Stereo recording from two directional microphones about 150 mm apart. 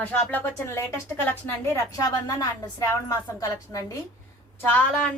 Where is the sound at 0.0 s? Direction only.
10° left (ahead or behind).